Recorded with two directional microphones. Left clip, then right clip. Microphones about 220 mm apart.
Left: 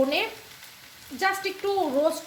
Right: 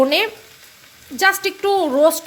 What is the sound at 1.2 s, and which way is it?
Speech, 50° right (ahead or behind).